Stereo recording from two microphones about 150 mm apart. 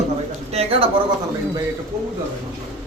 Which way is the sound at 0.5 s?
40° right (ahead or behind).